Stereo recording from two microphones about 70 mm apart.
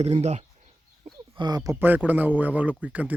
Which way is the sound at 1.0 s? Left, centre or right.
Right.